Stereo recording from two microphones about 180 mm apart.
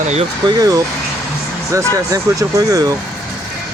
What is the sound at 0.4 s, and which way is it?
Speech, 20° right (ahead or behind).